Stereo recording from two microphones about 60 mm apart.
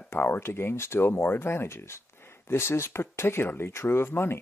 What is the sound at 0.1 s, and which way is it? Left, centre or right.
Speech, left.